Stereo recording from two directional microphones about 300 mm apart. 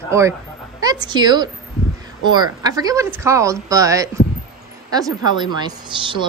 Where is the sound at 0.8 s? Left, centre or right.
Centre.